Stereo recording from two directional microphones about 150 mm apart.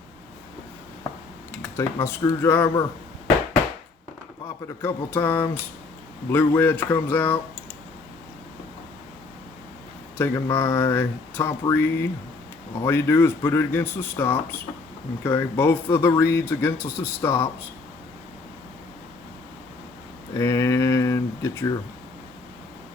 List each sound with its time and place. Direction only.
1.7 s speech: 15° left (ahead or behind)
4.4 s speech: 15° left (ahead or behind)
10.2 s speech: 15° left (ahead or behind)
20.3 s speech: 15° left (ahead or behind)